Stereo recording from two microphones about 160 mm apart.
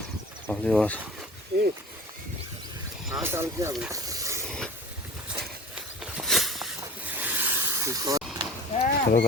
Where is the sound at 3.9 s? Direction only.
20° right (ahead or behind).